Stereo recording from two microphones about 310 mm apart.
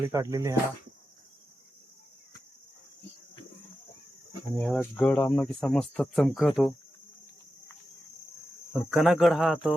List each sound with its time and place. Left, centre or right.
0.1 s cricket: centre
4.5 s speech: centre
8.7 s speech: centre